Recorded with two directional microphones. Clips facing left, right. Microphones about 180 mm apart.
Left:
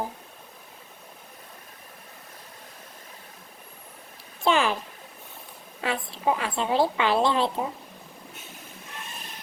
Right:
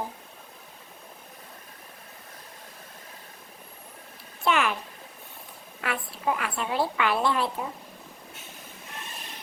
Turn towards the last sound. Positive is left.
turn(degrees=30)  # may be behind; listen again after turning